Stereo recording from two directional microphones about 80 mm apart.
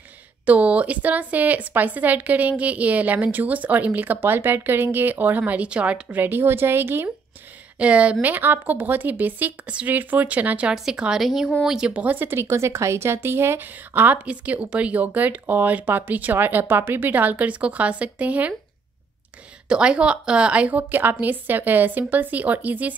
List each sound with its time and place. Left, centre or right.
0.5 s speech: centre
7.8 s a woman's voice: centre
11.9 s speech: centre
19.7 s speech: centre